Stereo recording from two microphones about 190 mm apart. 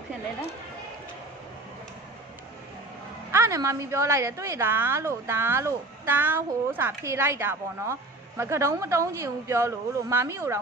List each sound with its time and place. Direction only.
3.3 s a woman's voice: 15° right (ahead or behind)